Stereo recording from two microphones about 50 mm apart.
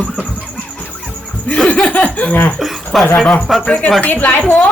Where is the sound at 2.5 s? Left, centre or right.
Centre.